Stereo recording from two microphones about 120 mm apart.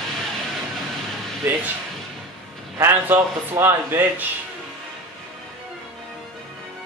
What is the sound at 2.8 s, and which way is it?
A man's voice, 20° right (ahead or behind).